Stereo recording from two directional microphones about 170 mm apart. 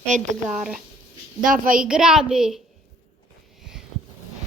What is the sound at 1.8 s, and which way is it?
Speech, 5° right (ahead or behind).